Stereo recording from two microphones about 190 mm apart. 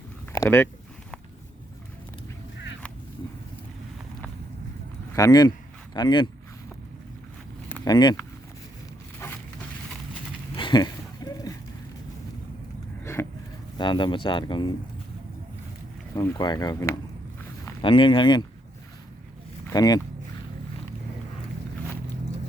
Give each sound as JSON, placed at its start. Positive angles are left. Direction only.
{"t": 0.3, "sound": "speech", "side_deg": 10}
{"t": 5.1, "sound": "speech", "side_deg": 20}
{"t": 7.9, "sound": "speech", "side_deg": 20}
{"t": 10.5, "sound": "a sound", "side_deg": 25}
{"t": 13.1, "sound": "a sound", "side_deg": 15}
{"t": 13.7, "sound": "speech", "side_deg": 25}
{"t": 16.1, "sound": "speech", "side_deg": 15}
{"t": 19.6, "sound": "speech", "side_deg": 20}